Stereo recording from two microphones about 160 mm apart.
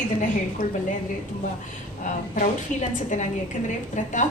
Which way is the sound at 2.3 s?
55° left (ahead or behind).